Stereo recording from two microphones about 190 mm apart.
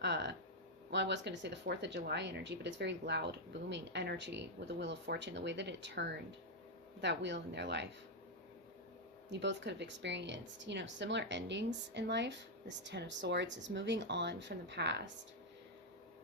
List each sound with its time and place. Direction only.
0.0 s a sound: 65° right (ahead or behind)
0.9 s speech: 65° right (ahead or behind)
9.3 s speech: 70° right (ahead or behind)